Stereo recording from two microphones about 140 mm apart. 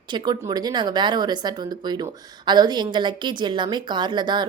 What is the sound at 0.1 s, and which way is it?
A woman's voice, 30° right (ahead or behind).